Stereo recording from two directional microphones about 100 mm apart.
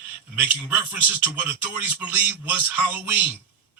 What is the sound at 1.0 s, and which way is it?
Speech, 15° right (ahead or behind).